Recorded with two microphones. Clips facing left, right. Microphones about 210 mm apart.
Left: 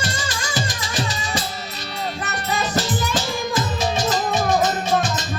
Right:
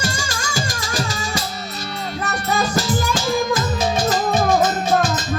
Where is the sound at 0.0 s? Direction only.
45° right (ahead or behind).